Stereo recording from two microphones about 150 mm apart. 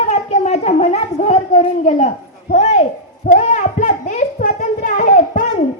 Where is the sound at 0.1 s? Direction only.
45° left (ahead or behind).